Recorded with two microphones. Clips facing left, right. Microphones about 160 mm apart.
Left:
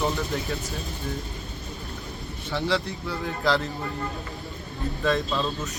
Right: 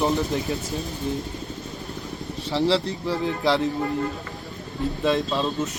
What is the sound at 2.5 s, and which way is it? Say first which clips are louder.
Speech: right 5 dB; 30° right (ahead or behind).